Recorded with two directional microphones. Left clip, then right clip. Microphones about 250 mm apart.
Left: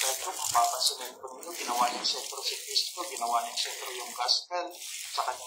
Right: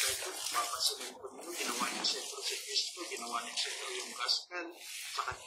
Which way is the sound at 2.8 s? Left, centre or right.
Centre.